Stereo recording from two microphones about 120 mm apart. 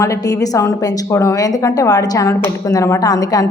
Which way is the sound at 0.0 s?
25° left (ahead or behind).